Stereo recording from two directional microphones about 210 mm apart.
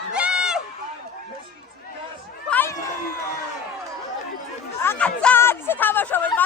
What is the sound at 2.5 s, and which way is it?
Cat, 10° left (ahead or behind).